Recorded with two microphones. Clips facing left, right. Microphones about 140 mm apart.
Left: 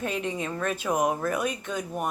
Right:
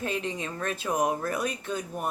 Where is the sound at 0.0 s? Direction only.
30° right (ahead or behind).